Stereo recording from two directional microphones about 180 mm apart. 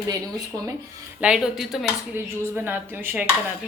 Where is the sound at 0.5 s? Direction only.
20° right (ahead or behind).